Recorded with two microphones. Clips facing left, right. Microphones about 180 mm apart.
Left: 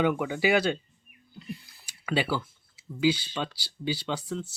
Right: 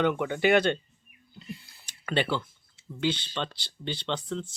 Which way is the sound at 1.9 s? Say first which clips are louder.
Even; 5° left (ahead or behind).